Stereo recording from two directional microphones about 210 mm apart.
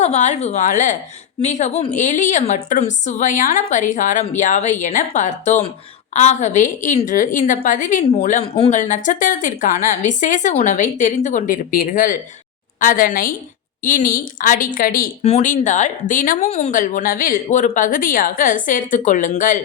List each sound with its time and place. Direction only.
0.0 s speech: 30° left (ahead or behind)